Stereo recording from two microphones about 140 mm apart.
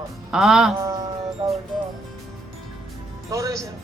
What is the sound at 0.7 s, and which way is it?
Speech, 20° right (ahead or behind).